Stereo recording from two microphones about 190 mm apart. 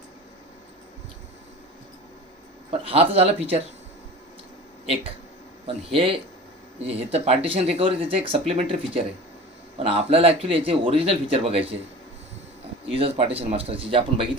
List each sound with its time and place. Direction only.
2.8 s speech: 30° right (ahead or behind)
5.7 s speech: 30° right (ahead or behind)
12.9 s speech: 30° right (ahead or behind)